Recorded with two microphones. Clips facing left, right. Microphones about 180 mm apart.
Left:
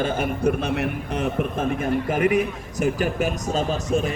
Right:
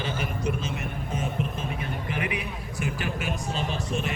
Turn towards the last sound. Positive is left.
turn(degrees=40)  # may be behind; listen again after turning